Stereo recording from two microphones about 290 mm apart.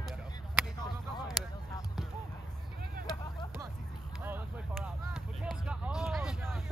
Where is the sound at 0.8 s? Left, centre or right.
Centre.